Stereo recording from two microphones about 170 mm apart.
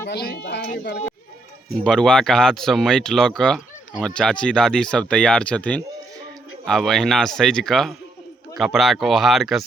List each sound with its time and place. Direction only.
0.1 s speech: 75° left (ahead or behind)
1.8 s speech: 5° left (ahead or behind)